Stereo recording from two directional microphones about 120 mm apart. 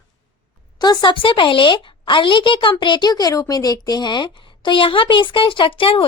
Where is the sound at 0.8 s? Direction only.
35° left (ahead or behind).